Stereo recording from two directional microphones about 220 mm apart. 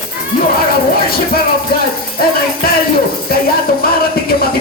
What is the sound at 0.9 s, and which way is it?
Beatboxing, 45° left (ahead or behind).